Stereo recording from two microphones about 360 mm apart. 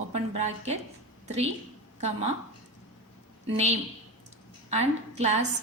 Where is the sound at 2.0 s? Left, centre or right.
Centre.